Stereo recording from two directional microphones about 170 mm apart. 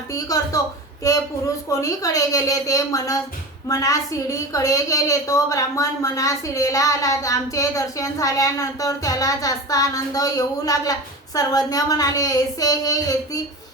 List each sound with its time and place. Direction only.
0.1 s a woman's voice: 20° left (ahead or behind)